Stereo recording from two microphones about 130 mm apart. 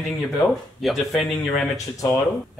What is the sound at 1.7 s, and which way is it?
Speech, 25° left (ahead or behind).